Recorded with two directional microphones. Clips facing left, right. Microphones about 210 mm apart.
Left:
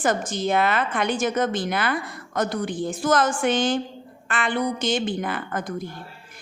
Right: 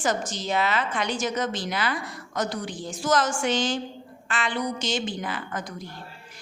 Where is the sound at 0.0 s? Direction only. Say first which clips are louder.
Left 4 dB; 55° left (ahead or behind).